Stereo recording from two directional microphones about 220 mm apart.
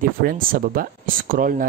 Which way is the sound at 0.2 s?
40° right (ahead or behind).